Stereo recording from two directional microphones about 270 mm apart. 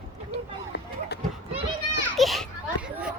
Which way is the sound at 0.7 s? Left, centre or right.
Left.